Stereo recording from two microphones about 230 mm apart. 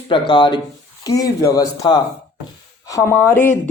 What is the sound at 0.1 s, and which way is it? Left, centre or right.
A man's voice, left.